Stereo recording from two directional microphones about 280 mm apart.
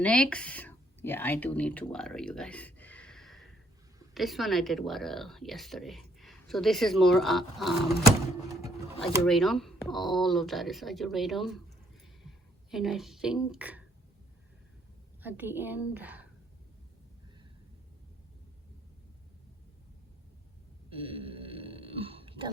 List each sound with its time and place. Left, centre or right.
0.0 s speech: centre
9.2 s speech: centre
12.7 s speech: centre
15.2 s a woman's voice: centre
20.9 s burping: centre